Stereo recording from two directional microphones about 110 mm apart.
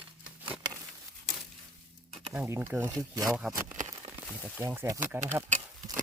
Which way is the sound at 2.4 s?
25° right (ahead or behind).